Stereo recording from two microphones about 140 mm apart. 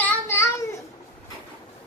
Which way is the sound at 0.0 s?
15° left (ahead or behind).